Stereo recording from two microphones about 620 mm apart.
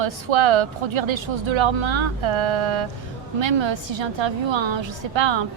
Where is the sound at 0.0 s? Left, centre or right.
Right.